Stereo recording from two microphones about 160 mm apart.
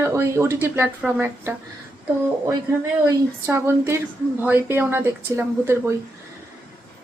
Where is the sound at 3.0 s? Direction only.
15° right (ahead or behind).